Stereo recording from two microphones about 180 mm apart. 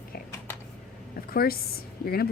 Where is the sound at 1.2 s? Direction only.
55° left (ahead or behind).